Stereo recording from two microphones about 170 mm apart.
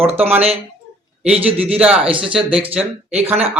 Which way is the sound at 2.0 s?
30° right (ahead or behind).